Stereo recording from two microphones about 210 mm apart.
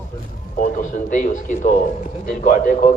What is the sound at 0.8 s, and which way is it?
A man's voice, 40° left (ahead or behind).